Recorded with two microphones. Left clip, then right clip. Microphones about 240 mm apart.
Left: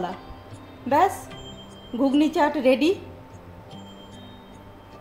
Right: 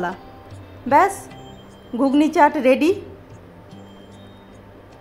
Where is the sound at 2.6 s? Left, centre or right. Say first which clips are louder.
Right 4 dB; right.